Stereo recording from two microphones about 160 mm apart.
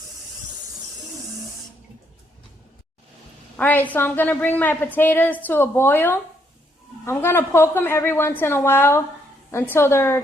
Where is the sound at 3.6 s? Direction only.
10° left (ahead or behind).